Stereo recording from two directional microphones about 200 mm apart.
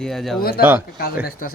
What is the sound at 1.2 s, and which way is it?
Speech, 45° left (ahead or behind).